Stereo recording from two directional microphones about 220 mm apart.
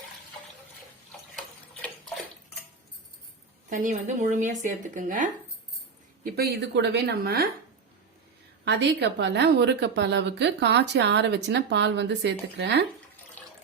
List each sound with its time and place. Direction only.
1.4 s tick-tock: centre (ahead or behind)
3.7 s speech: 35° right (ahead or behind)
6.3 s speech: 45° right (ahead or behind)
8.6 s speech: 50° right (ahead or behind)